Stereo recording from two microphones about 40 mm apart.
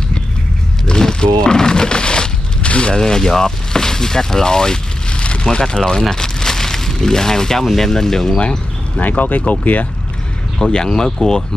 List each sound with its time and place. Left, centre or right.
0.8 s a sound: centre
3.0 s speech: centre
5.2 s a sound: left
5.6 s speech: centre
8.4 s speech: left
9.0 s speech: left
10.6 s speech: centre